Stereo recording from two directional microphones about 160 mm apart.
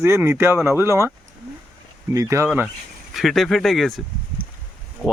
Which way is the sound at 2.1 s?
20° right (ahead or behind).